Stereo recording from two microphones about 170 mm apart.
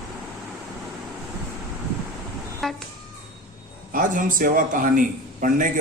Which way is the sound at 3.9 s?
55° right (ahead or behind).